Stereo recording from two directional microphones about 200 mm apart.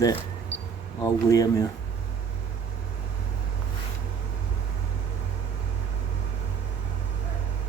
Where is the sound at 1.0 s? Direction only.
15° left (ahead or behind).